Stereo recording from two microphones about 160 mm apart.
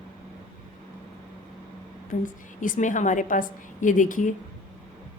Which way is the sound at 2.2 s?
55° left (ahead or behind).